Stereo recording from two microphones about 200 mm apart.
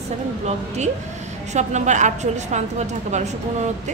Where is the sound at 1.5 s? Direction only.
35° right (ahead or behind).